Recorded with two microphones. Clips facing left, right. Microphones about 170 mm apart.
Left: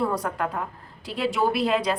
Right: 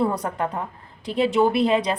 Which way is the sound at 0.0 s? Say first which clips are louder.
Right 2 dB; 20° right (ahead or behind).